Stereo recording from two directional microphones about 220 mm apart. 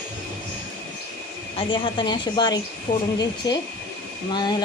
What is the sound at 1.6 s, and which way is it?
Speech, 20° left (ahead or behind).